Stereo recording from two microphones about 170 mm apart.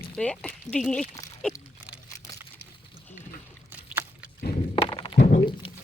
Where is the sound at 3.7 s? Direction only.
10° right (ahead or behind).